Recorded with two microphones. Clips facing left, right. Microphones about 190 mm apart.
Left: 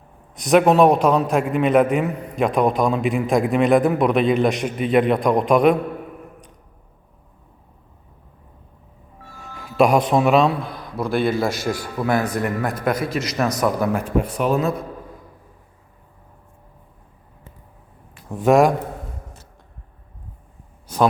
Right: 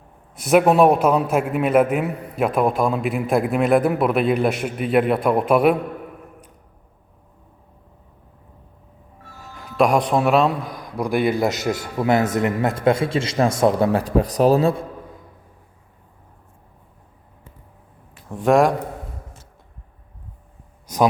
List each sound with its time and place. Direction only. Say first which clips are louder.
0.5 s a man's voice: even; 5° right (ahead or behind)
9.6 s speech: left 1 dB; 5° left (ahead or behind)
10.7 s a man's voice: even; 15° right (ahead or behind); by 14.8 s 35° right (ahead or behind)
18.3 s a man's voice: left 1 dB; 5° left (ahead or behind)
20.8 s a sound: even; 10° right (ahead or behind)